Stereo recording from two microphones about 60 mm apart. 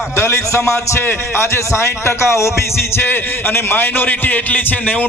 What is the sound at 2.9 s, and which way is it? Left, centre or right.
A man's voice, left.